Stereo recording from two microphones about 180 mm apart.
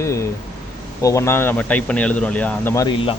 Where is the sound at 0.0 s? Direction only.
15° left (ahead or behind).